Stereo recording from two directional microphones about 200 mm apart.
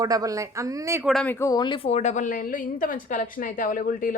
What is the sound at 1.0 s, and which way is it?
A woman's voice, 5° left (ahead or behind).